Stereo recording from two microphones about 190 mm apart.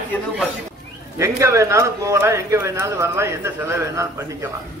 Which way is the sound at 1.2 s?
15° right (ahead or behind).